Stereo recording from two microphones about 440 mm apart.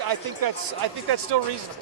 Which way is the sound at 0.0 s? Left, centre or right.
Right.